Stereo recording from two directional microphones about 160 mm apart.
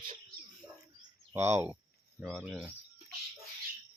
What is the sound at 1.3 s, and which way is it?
Speech, 15° right (ahead or behind).